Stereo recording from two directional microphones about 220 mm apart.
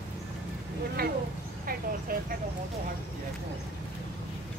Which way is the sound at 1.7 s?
40° right (ahead or behind).